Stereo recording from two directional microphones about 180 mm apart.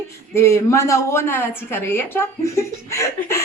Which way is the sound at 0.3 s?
15° left (ahead or behind).